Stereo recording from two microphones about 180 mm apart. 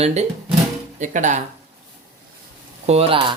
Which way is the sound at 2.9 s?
30° right (ahead or behind).